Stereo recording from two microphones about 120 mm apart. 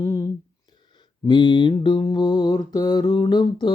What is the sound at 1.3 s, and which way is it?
Mantra, 40° left (ahead or behind).